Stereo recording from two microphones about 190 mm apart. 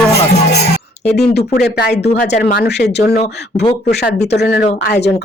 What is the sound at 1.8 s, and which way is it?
Speech, 60° left (ahead or behind).